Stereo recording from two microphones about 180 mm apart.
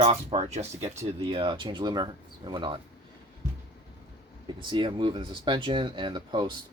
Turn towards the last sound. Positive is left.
turn(degrees=-25)  # may be behind; listen again after turning